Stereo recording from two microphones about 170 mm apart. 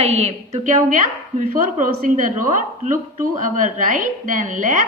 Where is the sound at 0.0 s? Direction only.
40° right (ahead or behind).